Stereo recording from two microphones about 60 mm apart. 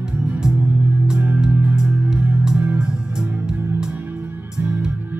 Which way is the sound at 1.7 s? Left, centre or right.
Centre.